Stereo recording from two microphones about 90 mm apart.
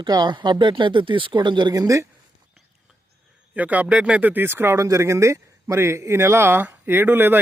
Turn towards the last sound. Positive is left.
turn(degrees=-25)  # may be behind; listen again after turning